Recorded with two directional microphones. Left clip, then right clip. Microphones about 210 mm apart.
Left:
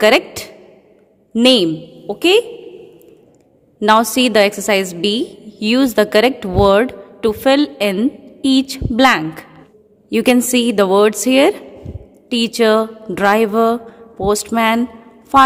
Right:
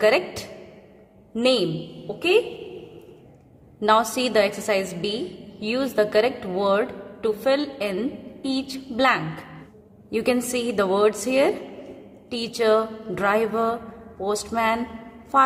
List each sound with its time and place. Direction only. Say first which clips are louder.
0.0 s a woman's voice: left 7 dB; 45° left (ahead or behind)
3.8 s a woman's voice: left 7 dB; 45° left (ahead or behind)